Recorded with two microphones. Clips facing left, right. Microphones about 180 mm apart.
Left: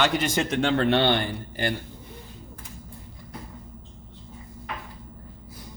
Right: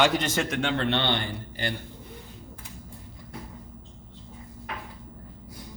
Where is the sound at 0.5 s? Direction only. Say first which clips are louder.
Left 8 dB; 40° left (ahead or behind).